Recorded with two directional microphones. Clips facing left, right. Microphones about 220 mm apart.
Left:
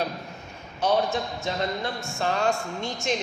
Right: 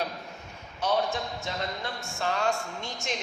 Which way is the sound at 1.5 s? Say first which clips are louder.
Left 6 dB; 25° left (ahead or behind).